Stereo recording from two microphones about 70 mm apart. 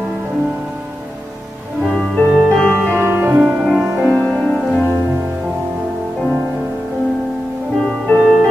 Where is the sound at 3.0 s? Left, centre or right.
Right.